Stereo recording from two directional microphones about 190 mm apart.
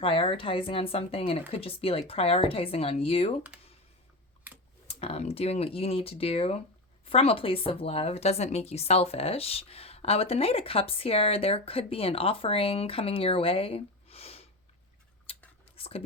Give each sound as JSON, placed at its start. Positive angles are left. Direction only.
{"t": 0.0, "sound": "speech", "side_deg": 25}
{"t": 4.9, "sound": "a woman's voice", "side_deg": 30}
{"t": 15.3, "sound": "whispering", "side_deg": 30}